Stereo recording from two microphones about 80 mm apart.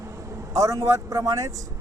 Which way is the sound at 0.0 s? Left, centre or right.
Right.